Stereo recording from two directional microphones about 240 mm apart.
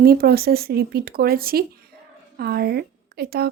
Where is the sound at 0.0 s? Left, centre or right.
Right.